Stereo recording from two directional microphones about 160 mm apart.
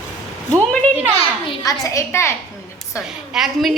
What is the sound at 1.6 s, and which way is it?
Speech, 20° left (ahead or behind).